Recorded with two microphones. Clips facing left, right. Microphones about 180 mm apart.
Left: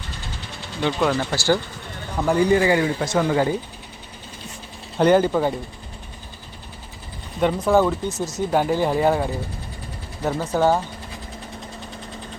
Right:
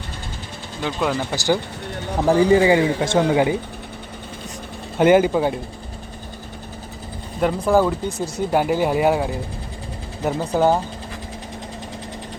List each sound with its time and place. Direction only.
0.8 s speech: 5° right (ahead or behind); by 3.2 s 25° right (ahead or behind)
4.9 s speech: 10° right (ahead or behind)
7.4 s speech: 10° right (ahead or behind)